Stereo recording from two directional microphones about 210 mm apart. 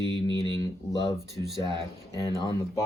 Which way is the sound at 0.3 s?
15° left (ahead or behind).